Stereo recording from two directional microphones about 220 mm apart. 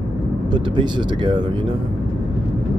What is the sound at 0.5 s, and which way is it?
Speech, 20° right (ahead or behind).